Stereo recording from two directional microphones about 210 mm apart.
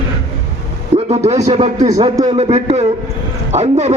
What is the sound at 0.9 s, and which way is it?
A man's voice, 30° right (ahead or behind).